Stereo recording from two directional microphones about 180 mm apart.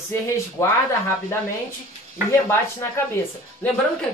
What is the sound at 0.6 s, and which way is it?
Speech, 20° left (ahead or behind).